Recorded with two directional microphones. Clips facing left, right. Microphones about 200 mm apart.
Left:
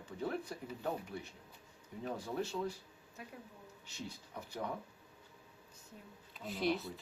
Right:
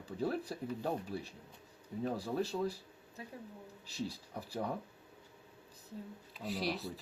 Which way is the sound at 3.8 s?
35° right (ahead or behind).